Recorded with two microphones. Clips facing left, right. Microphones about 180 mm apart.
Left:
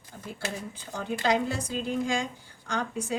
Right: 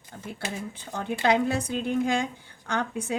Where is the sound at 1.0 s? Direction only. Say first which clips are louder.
Right 3 dB; 60° right (ahead or behind).